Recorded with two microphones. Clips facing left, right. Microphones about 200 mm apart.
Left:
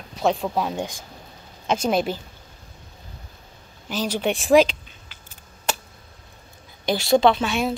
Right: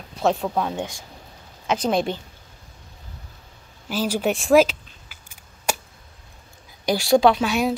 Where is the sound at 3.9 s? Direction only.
5° right (ahead or behind).